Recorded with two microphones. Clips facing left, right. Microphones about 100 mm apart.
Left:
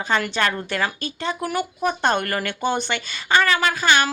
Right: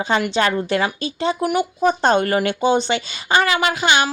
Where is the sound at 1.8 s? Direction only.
30° right (ahead or behind).